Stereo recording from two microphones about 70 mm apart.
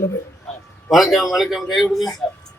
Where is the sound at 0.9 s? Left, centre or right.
Centre.